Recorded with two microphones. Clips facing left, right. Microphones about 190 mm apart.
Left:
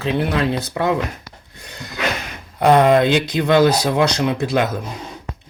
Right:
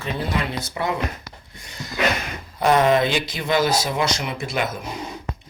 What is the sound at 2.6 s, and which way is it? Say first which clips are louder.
Speech: left 4 dB; 60° left (ahead or behind).